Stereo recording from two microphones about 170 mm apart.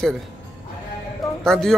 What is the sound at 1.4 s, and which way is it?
Speech, 5° left (ahead or behind).